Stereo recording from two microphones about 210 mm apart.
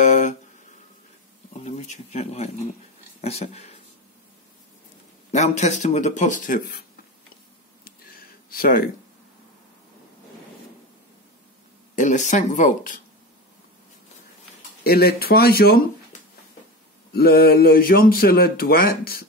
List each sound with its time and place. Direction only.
0.0 s a sound: 35° left (ahead or behind)
1.5 s speech: 30° left (ahead or behind)
5.3 s speech: 35° left (ahead or behind)
7.8 s a sound: 45° left (ahead or behind)
11.9 s speech: 35° left (ahead or behind)
14.8 s a man's voice: 50° left (ahead or behind)